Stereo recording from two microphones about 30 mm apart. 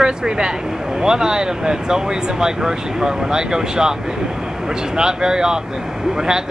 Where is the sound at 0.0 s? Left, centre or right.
Right.